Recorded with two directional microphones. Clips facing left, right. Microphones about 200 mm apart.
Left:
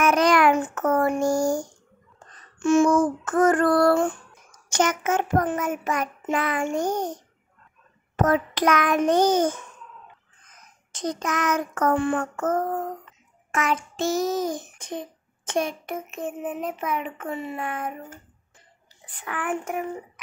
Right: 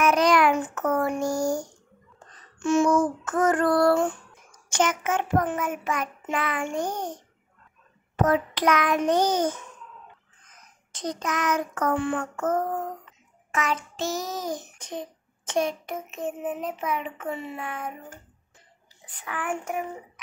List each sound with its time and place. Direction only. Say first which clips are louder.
0.0 s child singing: left 1 dB; 50° left (ahead or behind)
2.6 s child singing: left 3 dB; 50° left (ahead or behind)
4.6 s child singing: left 2 dB; 40° left (ahead or behind)
8.2 s child singing: left 1 dB; 45° left (ahead or behind)
10.9 s child singing: left 2 dB; 50° left (ahead or behind)
19.2 s child singing: left 2 dB; 55° left (ahead or behind)